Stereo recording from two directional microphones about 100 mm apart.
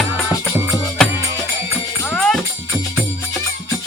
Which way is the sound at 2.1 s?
10° left (ahead or behind).